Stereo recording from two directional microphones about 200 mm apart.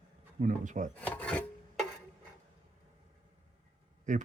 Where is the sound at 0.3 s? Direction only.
40° right (ahead or behind).